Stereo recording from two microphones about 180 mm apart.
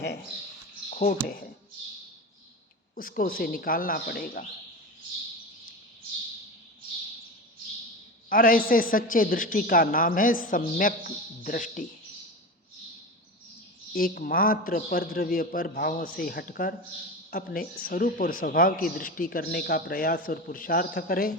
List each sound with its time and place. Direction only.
0.9 s speech: 50° left (ahead or behind)
2.9 s a man's voice: 55° left (ahead or behind)
8.3 s a man's voice: 50° left (ahead or behind)
13.9 s a man's voice: 55° left (ahead or behind)